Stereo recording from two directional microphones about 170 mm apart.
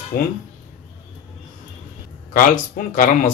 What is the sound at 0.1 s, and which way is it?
Speech, 60° left (ahead or behind).